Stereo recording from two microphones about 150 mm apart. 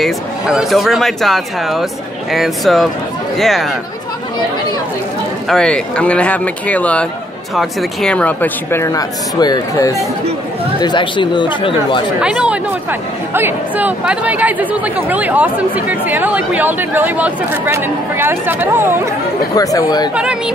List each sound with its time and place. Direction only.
0.0 s speech: centre (ahead or behind)
5.5 s speech: 5° left (ahead or behind); by 12.0 s 30° left (ahead or behind)
12.2 s speech: 5° right (ahead or behind)
19.5 s speech: 25° left (ahead or behind)
20.2 s speech: 5° right (ahead or behind)